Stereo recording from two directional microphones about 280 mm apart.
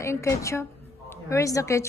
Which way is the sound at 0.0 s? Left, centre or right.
Centre.